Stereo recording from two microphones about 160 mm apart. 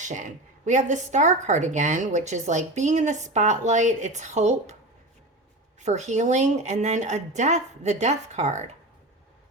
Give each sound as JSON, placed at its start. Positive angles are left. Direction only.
{"t": 0.0, "sound": "a woman's voice", "side_deg": -50}
{"t": 5.8, "sound": "a woman's voice", "side_deg": -45}